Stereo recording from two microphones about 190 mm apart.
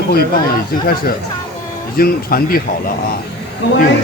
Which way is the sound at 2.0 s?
50° left (ahead or behind).